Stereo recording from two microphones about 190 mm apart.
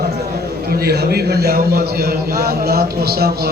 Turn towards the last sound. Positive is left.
turn(degrees=-55)  # may be behind; listen again after turning